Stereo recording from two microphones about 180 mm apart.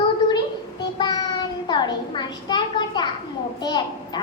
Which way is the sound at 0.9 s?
25° left (ahead or behind).